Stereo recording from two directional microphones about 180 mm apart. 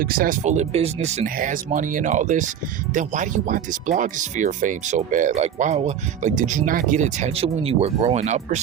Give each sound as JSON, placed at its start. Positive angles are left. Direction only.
{"t": 0.0, "sound": "speech", "side_deg": -55}